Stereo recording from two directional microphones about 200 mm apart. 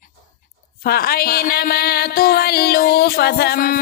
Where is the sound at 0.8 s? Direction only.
50° left (ahead or behind).